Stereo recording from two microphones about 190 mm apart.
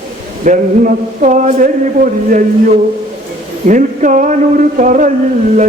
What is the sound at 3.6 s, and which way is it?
Speech, 40° right (ahead or behind).